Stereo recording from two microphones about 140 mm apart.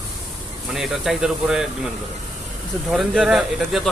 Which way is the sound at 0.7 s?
Centre (ahead or behind).